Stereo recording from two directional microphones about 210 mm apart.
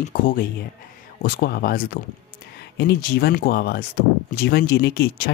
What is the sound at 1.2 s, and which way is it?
Speech, 45° left (ahead or behind).